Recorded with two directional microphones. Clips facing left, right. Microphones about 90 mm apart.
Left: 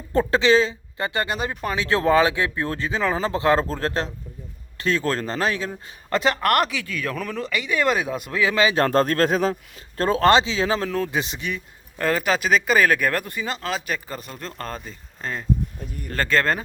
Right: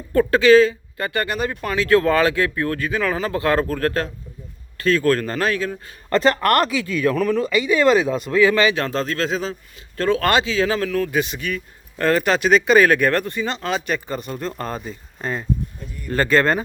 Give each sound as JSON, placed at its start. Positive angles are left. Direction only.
{"t": 0.1, "sound": "speech", "side_deg": 25}
{"t": 6.1, "sound": "speech", "side_deg": 5}
{"t": 8.7, "sound": "speech", "side_deg": 45}
{"t": 10.0, "sound": "speech", "side_deg": 30}
{"t": 11.9, "sound": "speech", "side_deg": 5}